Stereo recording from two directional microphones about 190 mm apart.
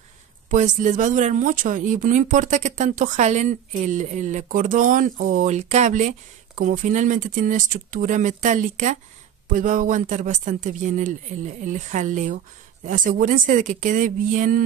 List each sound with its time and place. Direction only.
0.5 s speech: 40° right (ahead or behind)